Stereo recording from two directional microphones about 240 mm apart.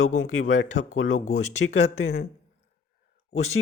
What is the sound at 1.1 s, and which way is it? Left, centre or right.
Speech, left.